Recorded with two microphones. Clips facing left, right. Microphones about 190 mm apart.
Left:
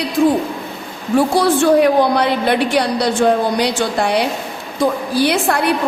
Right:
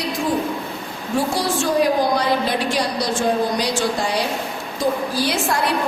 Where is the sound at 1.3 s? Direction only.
60° left (ahead or behind).